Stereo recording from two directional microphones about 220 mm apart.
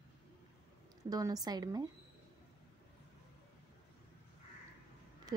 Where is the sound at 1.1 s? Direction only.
15° right (ahead or behind).